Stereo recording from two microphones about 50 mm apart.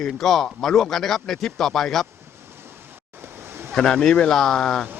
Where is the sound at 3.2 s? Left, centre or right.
Right.